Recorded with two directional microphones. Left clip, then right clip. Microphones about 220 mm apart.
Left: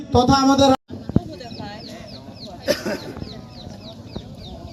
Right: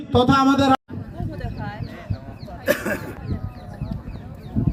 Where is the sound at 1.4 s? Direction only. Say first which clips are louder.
Right 1 dB; 10° right (ahead or behind).